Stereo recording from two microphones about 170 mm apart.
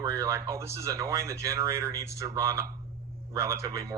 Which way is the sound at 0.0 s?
15° right (ahead or behind).